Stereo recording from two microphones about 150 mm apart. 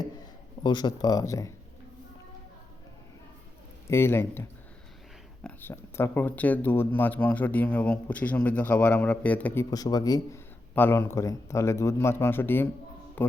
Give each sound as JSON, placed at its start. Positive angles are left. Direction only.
{"t": 0.6, "sound": "speech", "side_deg": 30}
{"t": 3.8, "sound": "speech", "side_deg": 15}
{"t": 9.6, "sound": "speech", "side_deg": 25}
{"t": 10.8, "sound": "speech", "side_deg": 15}
{"t": 13.2, "sound": "a sound", "side_deg": 15}